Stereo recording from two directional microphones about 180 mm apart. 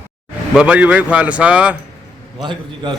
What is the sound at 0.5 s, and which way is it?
A man's voice, 5° right (ahead or behind).